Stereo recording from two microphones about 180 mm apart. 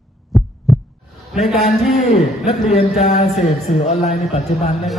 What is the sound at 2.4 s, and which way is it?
A man's voice, 35° left (ahead or behind).